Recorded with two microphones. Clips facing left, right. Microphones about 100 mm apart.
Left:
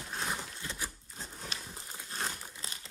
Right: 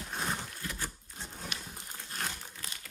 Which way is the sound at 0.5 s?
25° left (ahead or behind).